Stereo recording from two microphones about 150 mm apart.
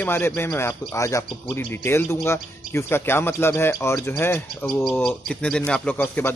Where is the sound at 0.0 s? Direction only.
15° left (ahead or behind).